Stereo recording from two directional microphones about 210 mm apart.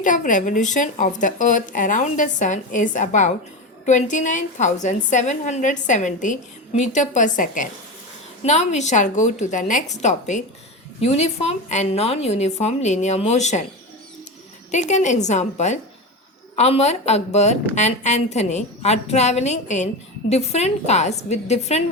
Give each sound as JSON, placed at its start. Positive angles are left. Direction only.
{"t": 0.0, "sound": "a woman's voice", "side_deg": 35}
{"t": 14.7, "sound": "a woman's voice", "side_deg": 35}